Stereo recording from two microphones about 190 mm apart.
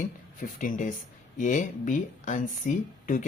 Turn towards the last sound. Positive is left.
turn(degrees=40)  # may be behind; listen again after turning